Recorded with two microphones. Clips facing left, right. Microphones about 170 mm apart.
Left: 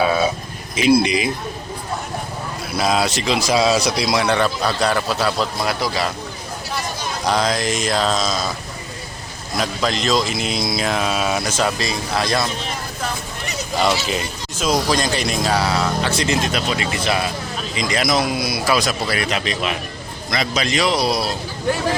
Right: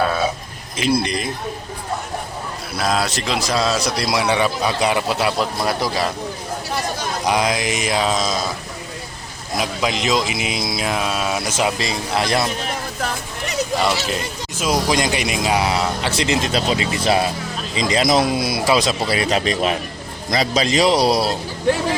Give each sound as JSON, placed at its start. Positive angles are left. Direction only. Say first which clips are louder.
{"t": 0.9, "sound": "a man's voice", "louder": "left 4 dB", "side_deg": 5}
{"t": 2.7, "sound": "a man's voice", "louder": "left 2 dB", "side_deg": 0}
{"t": 7.3, "sound": "speech", "louder": "even", "side_deg": -10}
{"t": 9.6, "sound": "speech", "louder": "even", "side_deg": -10}
{"t": 13.7, "sound": "a man's voice", "louder": "left 3 dB", "side_deg": 0}
{"t": 14.7, "sound": "a man's voice", "louder": "even", "side_deg": -15}